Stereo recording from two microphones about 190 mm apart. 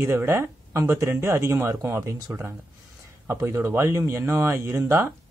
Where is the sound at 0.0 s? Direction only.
10° right (ahead or behind).